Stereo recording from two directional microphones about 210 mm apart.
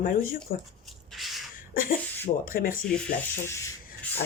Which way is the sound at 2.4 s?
40° left (ahead or behind).